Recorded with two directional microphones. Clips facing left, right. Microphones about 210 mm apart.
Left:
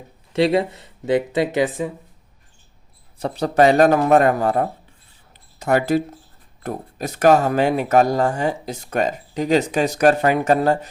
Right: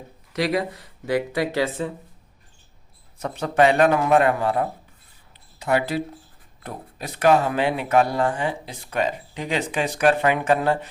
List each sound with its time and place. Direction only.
0.3 s speech: 25° left (ahead or behind)
3.2 s speech: 35° left (ahead or behind)